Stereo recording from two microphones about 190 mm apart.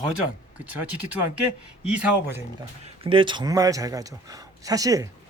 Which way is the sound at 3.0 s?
25° right (ahead or behind).